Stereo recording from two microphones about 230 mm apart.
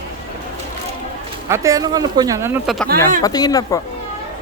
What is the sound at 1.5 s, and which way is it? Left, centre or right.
Speech, centre.